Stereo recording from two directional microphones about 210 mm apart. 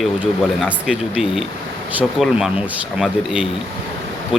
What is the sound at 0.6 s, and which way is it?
Speech, 5° right (ahead or behind).